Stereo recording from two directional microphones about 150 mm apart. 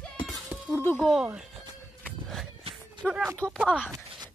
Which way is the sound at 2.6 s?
40° right (ahead or behind).